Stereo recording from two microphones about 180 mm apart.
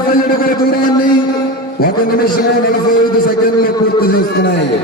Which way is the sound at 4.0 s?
65° left (ahead or behind).